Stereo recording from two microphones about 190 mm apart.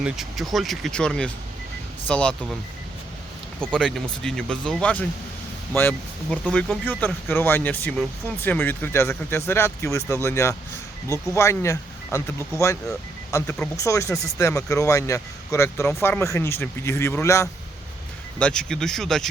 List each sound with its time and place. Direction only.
0.0 s speech: centre (ahead or behind)
3.7 s speech: 5° left (ahead or behind)
6.4 s speech: 5° left (ahead or behind)